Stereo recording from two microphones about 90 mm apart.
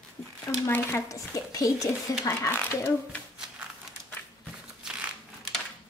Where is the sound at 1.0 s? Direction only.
40° left (ahead or behind).